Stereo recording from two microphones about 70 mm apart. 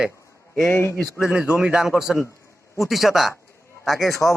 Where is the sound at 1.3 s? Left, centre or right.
Centre.